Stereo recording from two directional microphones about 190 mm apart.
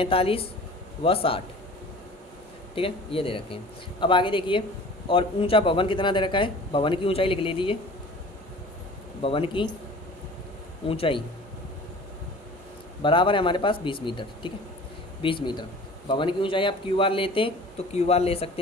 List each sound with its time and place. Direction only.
0.0 s a man's voice: 30° left (ahead or behind)
2.7 s a man's voice: 30° left (ahead or behind)
9.2 s a man's voice: 30° left (ahead or behind)
10.9 s a man's voice: 30° left (ahead or behind)
13.0 s a man's voice: 25° left (ahead or behind)